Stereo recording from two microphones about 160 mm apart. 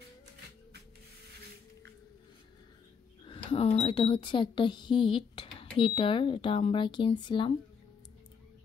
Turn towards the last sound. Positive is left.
turn(degrees=30)  # may be behind; listen again after turning